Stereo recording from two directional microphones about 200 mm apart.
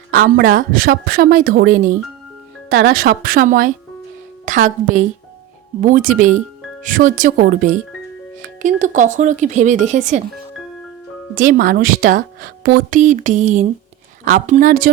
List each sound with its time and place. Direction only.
0.1 s speech: 45° right (ahead or behind)
11.3 s speech: 45° right (ahead or behind)